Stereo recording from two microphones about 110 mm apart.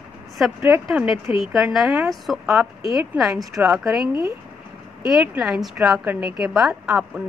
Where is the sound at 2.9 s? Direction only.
30° right (ahead or behind).